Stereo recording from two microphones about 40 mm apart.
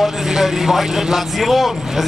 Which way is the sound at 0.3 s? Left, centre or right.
Centre.